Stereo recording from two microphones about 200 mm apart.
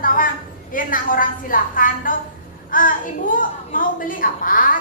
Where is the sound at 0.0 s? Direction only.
45° left (ahead or behind).